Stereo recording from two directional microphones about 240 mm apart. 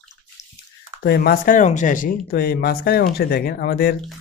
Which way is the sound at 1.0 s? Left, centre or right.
Left.